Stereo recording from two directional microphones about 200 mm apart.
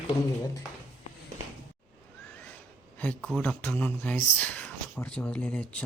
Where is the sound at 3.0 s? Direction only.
5° left (ahead or behind).